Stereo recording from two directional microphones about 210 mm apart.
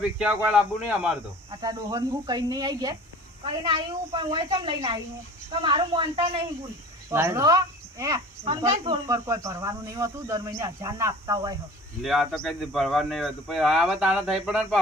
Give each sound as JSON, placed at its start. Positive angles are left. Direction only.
{"t": 0.2, "sound": "speech", "side_deg": -5}
{"t": 1.5, "sound": "speech", "side_deg": -20}
{"t": 7.1, "sound": "speech", "side_deg": -10}
{"t": 12.0, "sound": "speech", "side_deg": 0}